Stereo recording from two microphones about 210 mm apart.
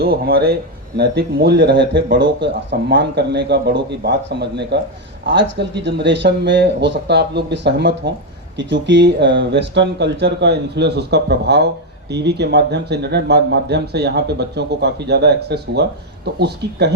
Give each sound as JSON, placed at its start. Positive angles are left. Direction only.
{"t": 0.0, "sound": "speech", "side_deg": -50}